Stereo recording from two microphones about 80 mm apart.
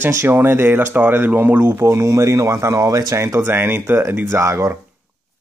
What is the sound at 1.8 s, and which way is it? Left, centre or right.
Speech, right.